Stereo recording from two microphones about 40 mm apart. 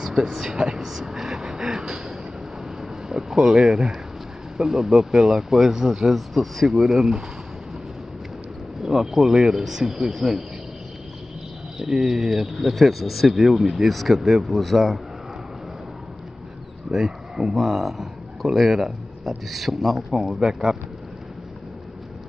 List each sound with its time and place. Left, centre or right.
0.0 s speech: centre
0.8 s a sound: centre
2.8 s speech: centre
6.7 s speech: centre
8.8 s speech: centre
11.8 s speech: centre
16.9 s speech: centre